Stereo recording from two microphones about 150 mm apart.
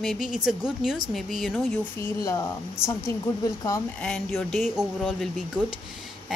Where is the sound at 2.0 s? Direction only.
20° left (ahead or behind).